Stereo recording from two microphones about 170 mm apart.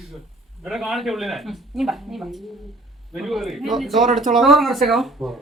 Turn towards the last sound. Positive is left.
turn(degrees=0)  # may be behind; listen again after turning